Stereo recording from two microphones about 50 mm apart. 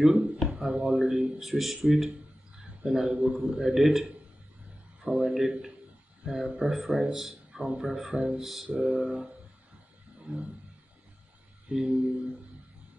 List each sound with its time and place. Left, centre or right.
0.0 s a sound: centre
0.7 s a man's voice: centre
11.7 s a man's voice: centre